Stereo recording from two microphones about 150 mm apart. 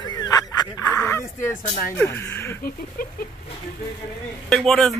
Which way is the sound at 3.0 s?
70° left (ahead or behind).